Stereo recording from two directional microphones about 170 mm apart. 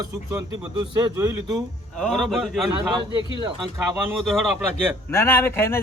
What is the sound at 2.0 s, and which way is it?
Speech, centre (ahead or behind).